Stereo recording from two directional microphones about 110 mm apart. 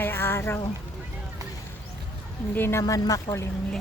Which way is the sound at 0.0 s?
20° left (ahead or behind).